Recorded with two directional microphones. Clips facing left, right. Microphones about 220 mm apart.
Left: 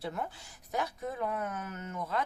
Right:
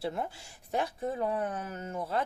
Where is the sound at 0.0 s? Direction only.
30° right (ahead or behind).